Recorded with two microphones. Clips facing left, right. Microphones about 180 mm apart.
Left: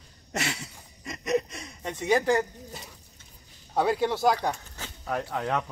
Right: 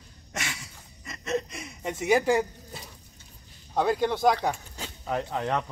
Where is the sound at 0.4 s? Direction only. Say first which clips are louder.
Left 4 dB; 35° left (ahead or behind).